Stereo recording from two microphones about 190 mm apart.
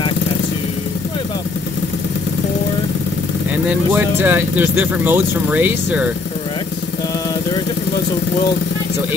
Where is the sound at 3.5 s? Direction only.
10° right (ahead or behind).